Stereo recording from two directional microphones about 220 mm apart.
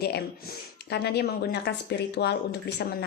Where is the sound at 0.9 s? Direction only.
50° left (ahead or behind).